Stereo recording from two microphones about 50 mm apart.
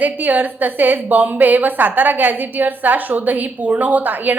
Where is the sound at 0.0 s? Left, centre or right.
Right.